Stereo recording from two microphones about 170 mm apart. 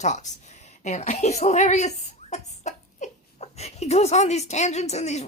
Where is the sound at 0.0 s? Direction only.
45° left (ahead or behind).